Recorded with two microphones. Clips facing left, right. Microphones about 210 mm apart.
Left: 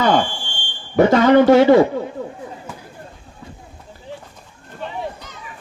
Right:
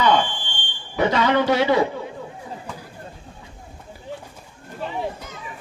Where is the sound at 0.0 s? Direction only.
45° left (ahead or behind).